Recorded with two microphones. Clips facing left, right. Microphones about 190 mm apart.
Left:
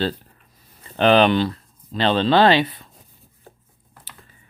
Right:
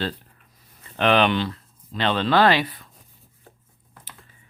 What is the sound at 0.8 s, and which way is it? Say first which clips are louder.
Speech: left 4 dB; 30° left (ahead or behind).